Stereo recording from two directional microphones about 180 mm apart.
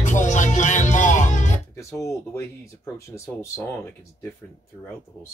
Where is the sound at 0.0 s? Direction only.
45° left (ahead or behind).